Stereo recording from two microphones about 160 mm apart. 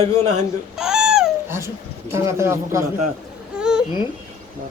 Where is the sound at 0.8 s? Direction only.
5° right (ahead or behind).